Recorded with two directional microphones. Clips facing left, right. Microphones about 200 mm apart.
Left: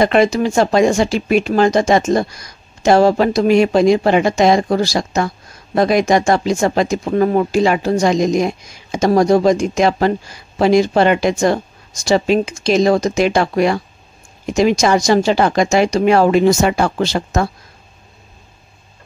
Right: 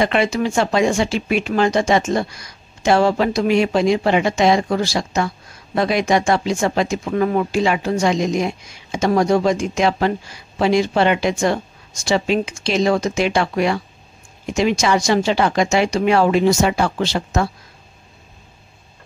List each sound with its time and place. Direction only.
0.0 s speech: 40° left (ahead or behind)